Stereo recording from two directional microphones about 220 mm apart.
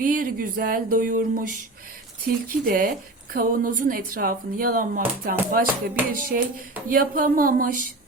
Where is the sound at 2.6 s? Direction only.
40° right (ahead or behind).